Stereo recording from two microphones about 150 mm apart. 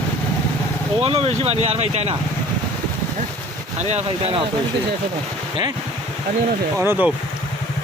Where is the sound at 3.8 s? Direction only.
50° right (ahead or behind).